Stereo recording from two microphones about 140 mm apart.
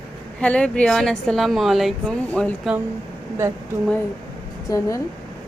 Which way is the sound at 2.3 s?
10° left (ahead or behind).